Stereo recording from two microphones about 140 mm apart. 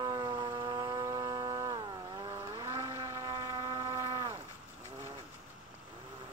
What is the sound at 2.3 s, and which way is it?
Boat, 20° right (ahead or behind).